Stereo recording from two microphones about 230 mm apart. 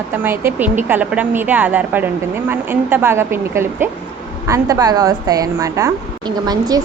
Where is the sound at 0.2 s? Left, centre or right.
Centre.